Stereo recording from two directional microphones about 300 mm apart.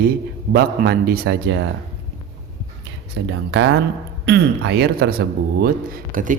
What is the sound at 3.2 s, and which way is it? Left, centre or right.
Speech, right.